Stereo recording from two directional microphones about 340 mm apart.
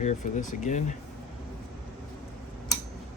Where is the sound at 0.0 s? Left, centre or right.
Left.